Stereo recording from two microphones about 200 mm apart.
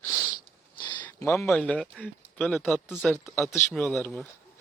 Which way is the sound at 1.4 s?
5° left (ahead or behind).